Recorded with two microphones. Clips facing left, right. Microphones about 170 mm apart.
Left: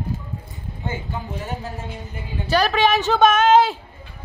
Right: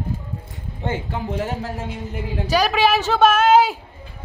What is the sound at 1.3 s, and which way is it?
Speech, 70° right (ahead or behind).